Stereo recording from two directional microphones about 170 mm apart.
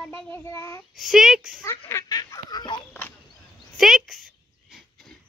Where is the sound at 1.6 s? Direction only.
15° left (ahead or behind).